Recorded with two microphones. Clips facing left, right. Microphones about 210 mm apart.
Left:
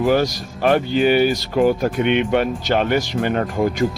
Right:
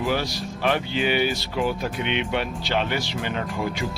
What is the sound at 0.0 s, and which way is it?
Speech, 45° left (ahead or behind).